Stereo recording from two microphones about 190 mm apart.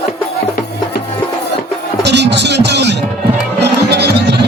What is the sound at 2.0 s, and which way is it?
Music, 65° right (ahead or behind).